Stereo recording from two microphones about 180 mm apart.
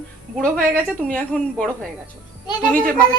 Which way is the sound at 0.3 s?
5° left (ahead or behind).